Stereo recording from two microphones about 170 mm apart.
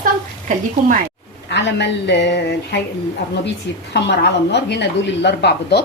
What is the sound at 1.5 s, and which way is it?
A woman's voice, 90° left.